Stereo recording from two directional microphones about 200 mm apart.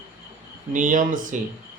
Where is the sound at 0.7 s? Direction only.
40° right (ahead or behind).